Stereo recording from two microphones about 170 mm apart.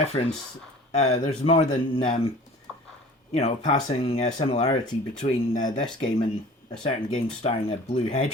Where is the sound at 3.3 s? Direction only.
40° left (ahead or behind).